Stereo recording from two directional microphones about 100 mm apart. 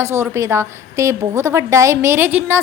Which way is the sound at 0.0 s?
30° right (ahead or behind).